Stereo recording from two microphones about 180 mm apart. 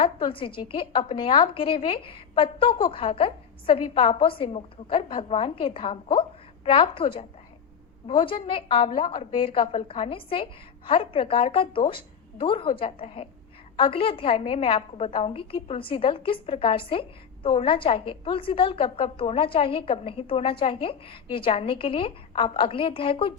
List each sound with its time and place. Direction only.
0.0 s a woman's voice: 30° left (ahead or behind)